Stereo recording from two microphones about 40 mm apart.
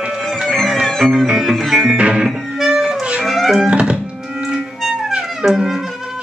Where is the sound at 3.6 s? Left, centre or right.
Right.